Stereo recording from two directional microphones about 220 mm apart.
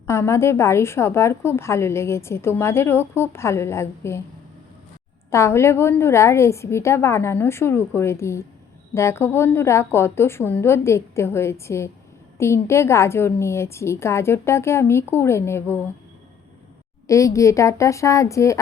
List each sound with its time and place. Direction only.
0.1 s a woman's voice: 10° left (ahead or behind)
5.3 s a woman's voice: 10° left (ahead or behind)
17.1 s a woman's voice: 15° left (ahead or behind)